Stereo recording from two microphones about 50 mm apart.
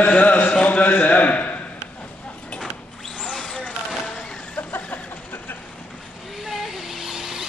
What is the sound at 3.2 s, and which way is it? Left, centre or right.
Vehicle, centre.